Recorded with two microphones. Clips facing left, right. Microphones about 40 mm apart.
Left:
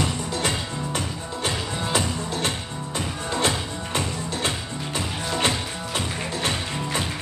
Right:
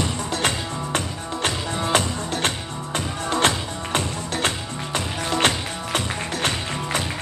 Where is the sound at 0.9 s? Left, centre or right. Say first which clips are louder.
Right 3 dB; right.